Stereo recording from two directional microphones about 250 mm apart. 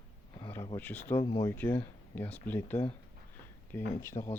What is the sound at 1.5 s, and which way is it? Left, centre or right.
Speech, centre.